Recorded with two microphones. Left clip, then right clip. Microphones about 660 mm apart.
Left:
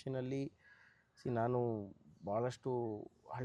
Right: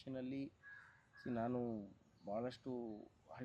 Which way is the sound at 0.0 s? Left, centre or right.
Left.